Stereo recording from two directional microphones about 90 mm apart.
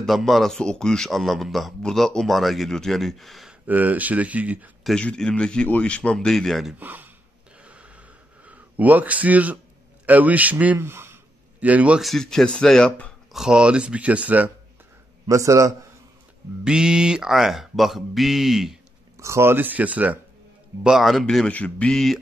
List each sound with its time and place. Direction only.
0.0 s a man's voice: centre (ahead or behind)
3.6 s speech: 20° right (ahead or behind)
5.0 s a man's voice: 10° left (ahead or behind)
6.8 s speech: 20° right (ahead or behind)
7.6 s gasp: 15° right (ahead or behind)
10.0 s speech: 15° right (ahead or behind)
11.6 s speech: 15° right (ahead or behind)
12.0 s a man's voice: 5° left (ahead or behind)
13.3 s speech: 5° right (ahead or behind)
15.2 s a man's voice: 35° right (ahead or behind)
16.6 s a man's voice: 10° right (ahead or behind)
19.1 s speech: 30° right (ahead or behind); by 20.2 s 15° right (ahead or behind)
20.8 s a man's voice: centre (ahead or behind)
21.5 s a man's voice: 15° left (ahead or behind)